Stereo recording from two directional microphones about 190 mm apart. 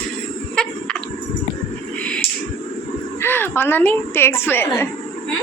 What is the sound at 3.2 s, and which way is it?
A woman's voice, 10° left (ahead or behind).